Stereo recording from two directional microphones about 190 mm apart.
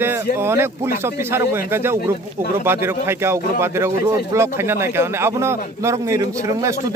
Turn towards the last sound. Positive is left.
turn(degrees=-15)  # may be behind; listen again after turning